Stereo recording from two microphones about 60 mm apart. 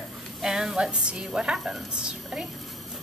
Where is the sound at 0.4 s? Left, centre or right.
Centre.